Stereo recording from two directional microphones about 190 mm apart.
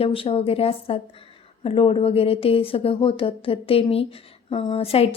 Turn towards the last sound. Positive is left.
turn(degrees=30)  # may be behind; listen again after turning